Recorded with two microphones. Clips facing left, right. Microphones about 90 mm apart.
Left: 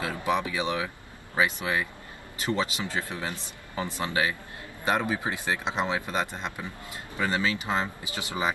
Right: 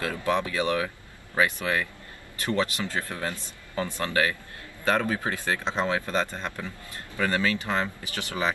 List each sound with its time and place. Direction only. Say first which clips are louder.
0.0 s a man's voice: right 1 dB; 15° left (ahead or behind)